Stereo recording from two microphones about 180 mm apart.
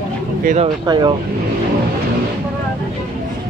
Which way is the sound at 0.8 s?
25° right (ahead or behind).